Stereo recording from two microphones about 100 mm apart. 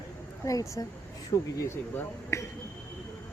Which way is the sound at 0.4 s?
35° left (ahead or behind).